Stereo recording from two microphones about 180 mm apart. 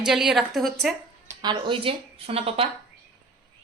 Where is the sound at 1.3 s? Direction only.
25° right (ahead or behind).